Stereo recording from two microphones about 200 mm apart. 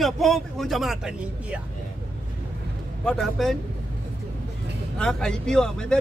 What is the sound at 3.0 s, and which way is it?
Speech, centre (ahead or behind).